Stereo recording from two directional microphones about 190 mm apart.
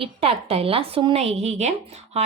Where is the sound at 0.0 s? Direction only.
30° right (ahead or behind).